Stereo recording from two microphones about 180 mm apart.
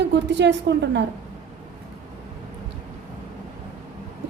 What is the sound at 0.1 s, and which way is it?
Speech, 75° right (ahead or behind).